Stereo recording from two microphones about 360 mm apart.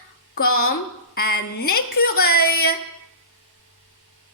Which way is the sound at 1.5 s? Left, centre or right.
Left.